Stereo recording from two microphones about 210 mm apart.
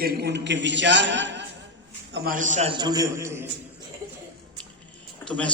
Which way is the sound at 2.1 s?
45° right (ahead or behind).